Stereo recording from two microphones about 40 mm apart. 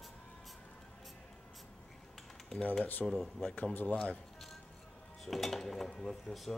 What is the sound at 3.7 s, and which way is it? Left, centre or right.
Speech, left.